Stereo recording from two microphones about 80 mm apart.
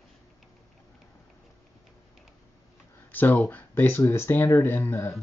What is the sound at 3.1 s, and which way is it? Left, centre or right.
Speech, left.